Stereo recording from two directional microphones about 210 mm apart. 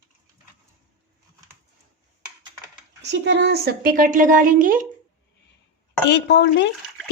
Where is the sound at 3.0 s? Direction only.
55° right (ahead or behind).